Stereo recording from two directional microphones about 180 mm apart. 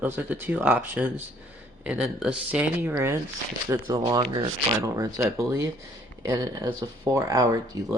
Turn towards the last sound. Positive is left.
turn(degrees=-20)  # may be behind; listen again after turning